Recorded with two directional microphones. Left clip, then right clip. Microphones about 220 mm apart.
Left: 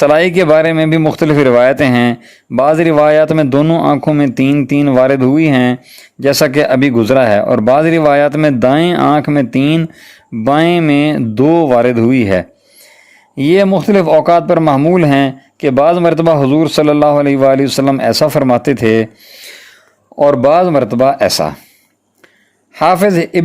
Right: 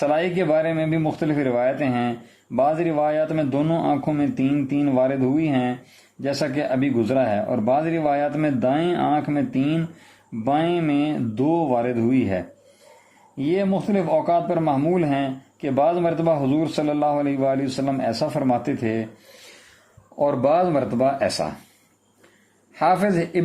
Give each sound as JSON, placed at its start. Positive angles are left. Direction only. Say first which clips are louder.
{"t": 0.0, "sound": "a man's voice", "louder": "left 12 dB", "side_deg": 45}
{"t": 22.7, "sound": "speech", "louder": "left 10 dB", "side_deg": 40}